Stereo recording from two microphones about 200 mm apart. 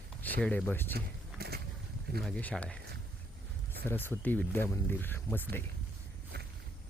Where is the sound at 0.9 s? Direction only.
50° right (ahead or behind).